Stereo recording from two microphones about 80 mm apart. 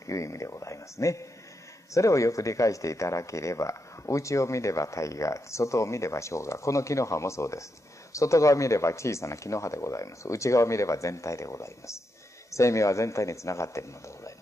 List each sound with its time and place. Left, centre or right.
0.0 s speech: left